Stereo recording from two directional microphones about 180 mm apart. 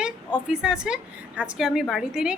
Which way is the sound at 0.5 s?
5° right (ahead or behind).